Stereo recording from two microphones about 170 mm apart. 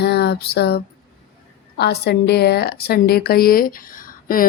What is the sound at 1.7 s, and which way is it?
A woman's voice, 70° left (ahead or behind).